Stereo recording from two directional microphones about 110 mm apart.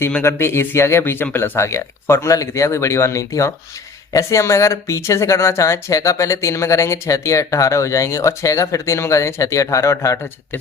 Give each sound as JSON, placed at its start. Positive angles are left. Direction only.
{"t": 0.2, "sound": "speech", "side_deg": 20}